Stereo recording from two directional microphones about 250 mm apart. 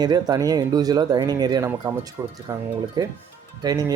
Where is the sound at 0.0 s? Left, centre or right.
Centre.